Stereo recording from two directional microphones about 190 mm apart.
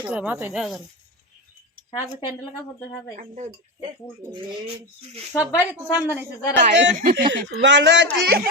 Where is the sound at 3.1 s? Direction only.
40° right (ahead or behind).